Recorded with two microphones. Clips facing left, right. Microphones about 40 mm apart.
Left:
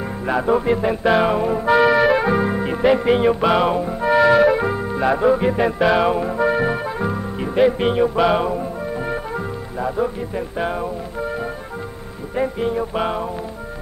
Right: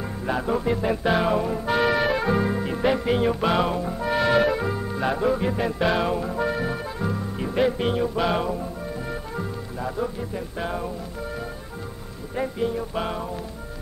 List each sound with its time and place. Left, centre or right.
0.3 s music: left
9.8 s music: left
12.4 s music: left